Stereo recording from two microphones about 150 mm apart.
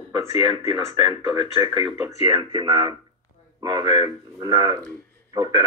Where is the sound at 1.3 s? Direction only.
30° right (ahead or behind).